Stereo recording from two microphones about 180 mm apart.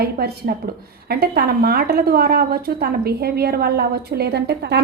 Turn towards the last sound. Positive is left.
turn(degrees=-65)  # may be behind; listen again after turning